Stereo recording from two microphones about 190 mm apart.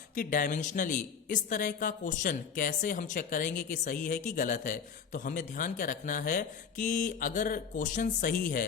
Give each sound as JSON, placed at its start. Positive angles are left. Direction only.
{"t": 0.2, "sound": "a woman's voice", "side_deg": 45}